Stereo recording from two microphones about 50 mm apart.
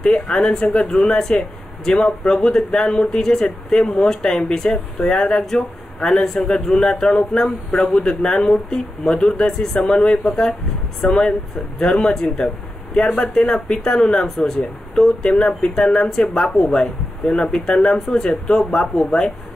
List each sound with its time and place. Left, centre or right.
0.0 s speech: centre
11.0 s speech: centre